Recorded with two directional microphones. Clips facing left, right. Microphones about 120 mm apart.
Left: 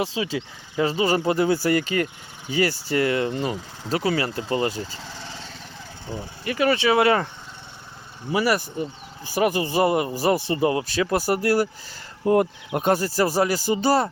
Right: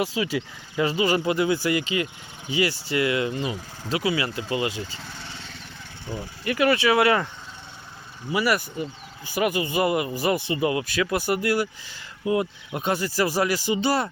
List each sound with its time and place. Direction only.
0.0 s speech: 25° left (ahead or behind)
6.1 s speech: 25° left (ahead or behind)
8.3 s speech: 35° left (ahead or behind)
12.2 s speech: 50° left (ahead or behind); by 14.1 s 35° left (ahead or behind)